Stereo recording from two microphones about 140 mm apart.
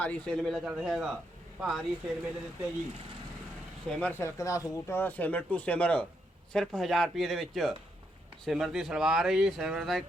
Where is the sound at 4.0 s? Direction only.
15° left (ahead or behind).